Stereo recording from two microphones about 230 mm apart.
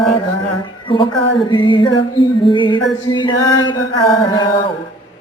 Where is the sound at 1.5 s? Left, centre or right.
Left.